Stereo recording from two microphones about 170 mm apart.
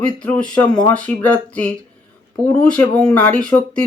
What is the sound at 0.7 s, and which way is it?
Speech, 25° left (ahead or behind).